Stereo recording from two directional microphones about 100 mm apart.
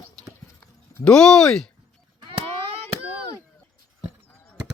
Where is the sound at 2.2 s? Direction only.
60° right (ahead or behind).